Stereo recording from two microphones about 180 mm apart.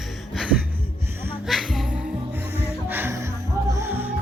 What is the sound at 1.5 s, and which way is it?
Music, centre (ahead or behind).